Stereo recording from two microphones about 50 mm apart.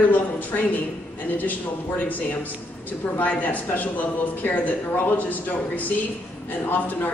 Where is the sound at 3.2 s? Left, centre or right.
Left.